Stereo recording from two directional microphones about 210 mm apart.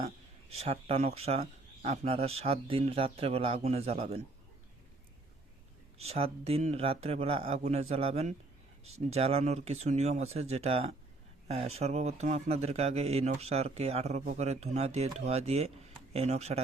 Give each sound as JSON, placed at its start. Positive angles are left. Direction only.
{"t": 0.5, "sound": "speech", "side_deg": -30}
{"t": 6.0, "sound": "speech", "side_deg": -30}